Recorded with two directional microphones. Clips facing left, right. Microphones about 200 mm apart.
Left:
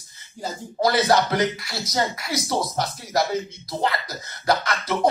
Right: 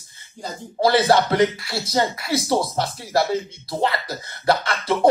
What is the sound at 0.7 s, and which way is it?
Speech, 30° right (ahead or behind).